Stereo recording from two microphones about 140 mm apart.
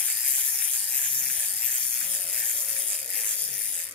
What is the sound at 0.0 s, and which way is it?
Bicycle, 5° left (ahead or behind).